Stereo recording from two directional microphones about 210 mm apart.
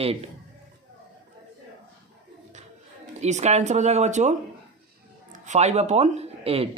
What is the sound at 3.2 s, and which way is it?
Speech, 35° right (ahead or behind).